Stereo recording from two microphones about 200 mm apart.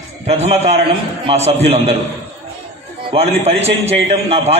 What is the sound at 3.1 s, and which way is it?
A man's voice, 30° right (ahead or behind).